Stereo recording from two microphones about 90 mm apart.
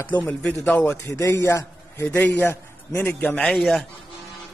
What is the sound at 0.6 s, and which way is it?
Speech, 15° left (ahead or behind).